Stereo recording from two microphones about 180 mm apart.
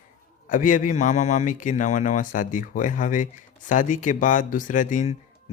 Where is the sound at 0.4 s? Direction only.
45° left (ahead or behind).